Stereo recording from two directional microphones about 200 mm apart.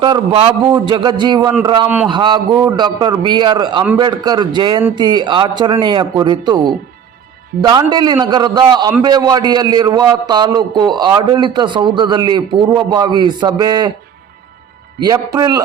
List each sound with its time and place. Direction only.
0.0 s a man's voice: 25° right (ahead or behind)
15.0 s a man's voice: 20° right (ahead or behind)